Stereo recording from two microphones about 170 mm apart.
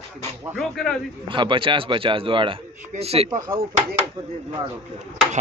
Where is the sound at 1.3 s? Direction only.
30° right (ahead or behind).